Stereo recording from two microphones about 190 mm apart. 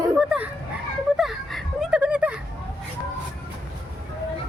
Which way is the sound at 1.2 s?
Centre (ahead or behind).